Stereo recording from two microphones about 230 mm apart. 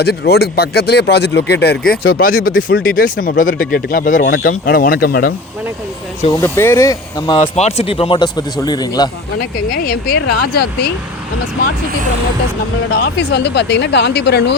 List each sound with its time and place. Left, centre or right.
0.0 s speech: left
6.4 s speech: centre
9.4 s speech: left
12.9 s speech: left